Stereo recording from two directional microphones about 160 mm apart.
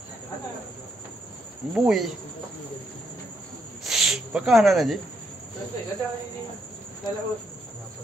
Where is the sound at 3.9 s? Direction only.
5° right (ahead or behind).